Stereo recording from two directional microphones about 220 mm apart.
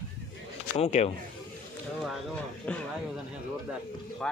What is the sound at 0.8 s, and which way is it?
Speech, 30° left (ahead or behind).